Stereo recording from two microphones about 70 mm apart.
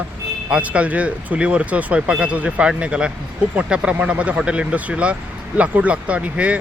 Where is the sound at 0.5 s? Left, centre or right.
Centre.